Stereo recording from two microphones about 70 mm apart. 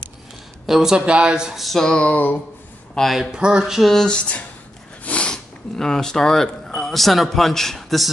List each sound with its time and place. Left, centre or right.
0.7 s speech: centre
1.6 s a sound: centre; by 2.4 s left
2.9 s speech: centre
5.0 s speech: centre